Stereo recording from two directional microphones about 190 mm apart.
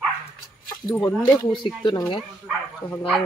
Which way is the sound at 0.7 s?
20° left (ahead or behind).